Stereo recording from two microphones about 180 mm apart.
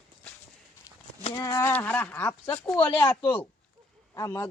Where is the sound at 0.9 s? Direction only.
20° left (ahead or behind).